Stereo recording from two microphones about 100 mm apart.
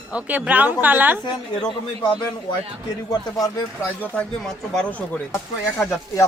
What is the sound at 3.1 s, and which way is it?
Speech, 40° left (ahead or behind).